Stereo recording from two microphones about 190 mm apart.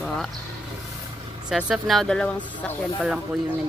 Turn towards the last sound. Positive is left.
turn(degrees=0)  # may be behind; listen again after turning